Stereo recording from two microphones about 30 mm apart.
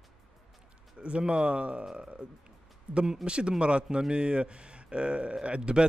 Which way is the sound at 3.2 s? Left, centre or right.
Right.